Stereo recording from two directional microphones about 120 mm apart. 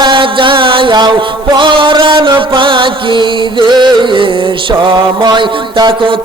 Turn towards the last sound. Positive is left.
turn(degrees=-40)  # may be behind; listen again after turning